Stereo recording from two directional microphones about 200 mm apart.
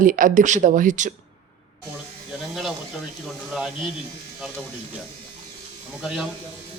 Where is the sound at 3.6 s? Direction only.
Centre (ahead or behind).